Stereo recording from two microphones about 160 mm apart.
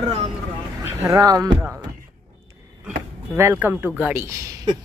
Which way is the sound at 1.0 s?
20° right (ahead or behind).